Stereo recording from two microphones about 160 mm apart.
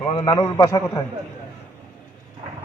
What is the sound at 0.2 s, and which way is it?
Speech, 25° left (ahead or behind).